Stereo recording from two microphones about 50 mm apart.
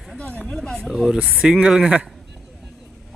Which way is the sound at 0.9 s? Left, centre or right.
Centre.